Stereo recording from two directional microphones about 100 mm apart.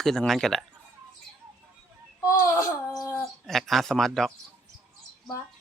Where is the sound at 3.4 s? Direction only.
Centre (ahead or behind).